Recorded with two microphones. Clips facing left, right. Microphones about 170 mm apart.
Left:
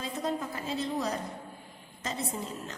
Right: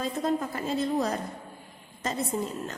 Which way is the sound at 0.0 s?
50° right (ahead or behind).